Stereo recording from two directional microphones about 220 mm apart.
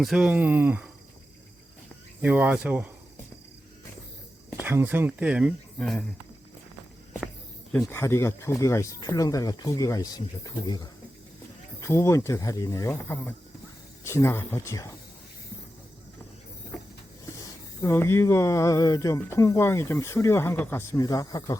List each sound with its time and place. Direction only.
0.0 s speech: 5° right (ahead or behind)
2.2 s speech: 5° right (ahead or behind)
4.6 s speech: 10° right (ahead or behind)
7.7 s speech: 5° left (ahead or behind)
17.4 s speech: 15° left (ahead or behind)